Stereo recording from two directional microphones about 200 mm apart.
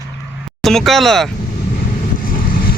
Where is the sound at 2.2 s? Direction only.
45° left (ahead or behind).